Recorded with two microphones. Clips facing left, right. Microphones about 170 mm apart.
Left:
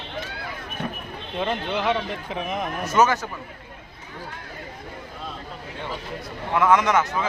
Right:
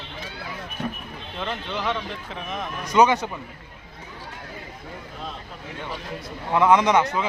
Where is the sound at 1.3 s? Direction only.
15° left (ahead or behind).